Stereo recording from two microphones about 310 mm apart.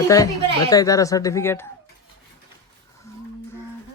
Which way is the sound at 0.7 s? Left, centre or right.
Centre.